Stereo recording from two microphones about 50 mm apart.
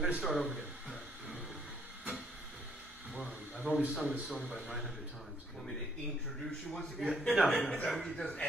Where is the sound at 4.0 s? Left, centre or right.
Centre.